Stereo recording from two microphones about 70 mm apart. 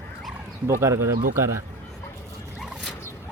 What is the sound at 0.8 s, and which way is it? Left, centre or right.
Speech, right.